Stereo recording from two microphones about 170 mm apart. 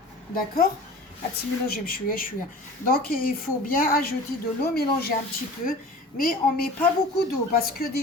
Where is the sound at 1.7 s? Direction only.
60° left (ahead or behind).